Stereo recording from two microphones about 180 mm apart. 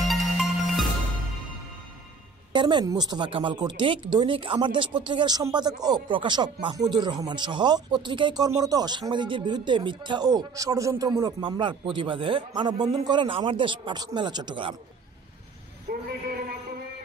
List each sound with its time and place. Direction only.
0.1 s music: centre (ahead or behind)
2.5 s speech: 25° right (ahead or behind)
15.9 s a sound: 55° right (ahead or behind)